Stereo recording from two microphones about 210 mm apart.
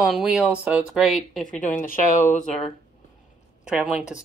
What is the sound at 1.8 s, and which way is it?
Speech, 40° left (ahead or behind).